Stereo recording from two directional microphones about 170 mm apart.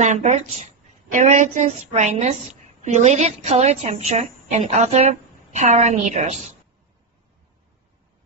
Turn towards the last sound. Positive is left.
turn(degrees=-45)  # may be behind; listen again after turning